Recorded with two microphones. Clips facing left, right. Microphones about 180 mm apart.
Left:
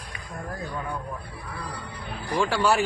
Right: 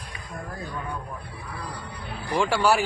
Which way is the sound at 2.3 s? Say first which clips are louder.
Right 1 dB; 10° right (ahead or behind).